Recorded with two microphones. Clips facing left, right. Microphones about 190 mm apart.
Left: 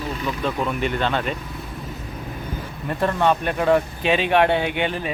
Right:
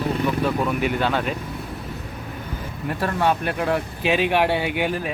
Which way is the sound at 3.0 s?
5° right (ahead or behind).